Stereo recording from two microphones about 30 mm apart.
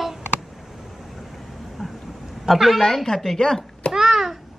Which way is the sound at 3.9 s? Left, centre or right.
Centre.